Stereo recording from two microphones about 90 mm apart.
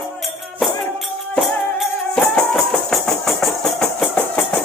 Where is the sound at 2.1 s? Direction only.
5° left (ahead or behind).